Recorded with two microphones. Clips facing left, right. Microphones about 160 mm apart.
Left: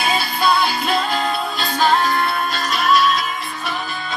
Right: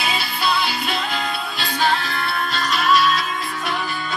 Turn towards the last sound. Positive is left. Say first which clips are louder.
# left 1 dB
turn(degrees=45)  # may be behind; listen again after turning